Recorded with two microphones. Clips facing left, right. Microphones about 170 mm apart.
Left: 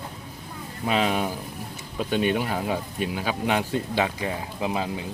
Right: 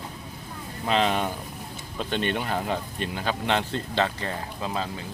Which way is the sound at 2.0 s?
10° left (ahead or behind).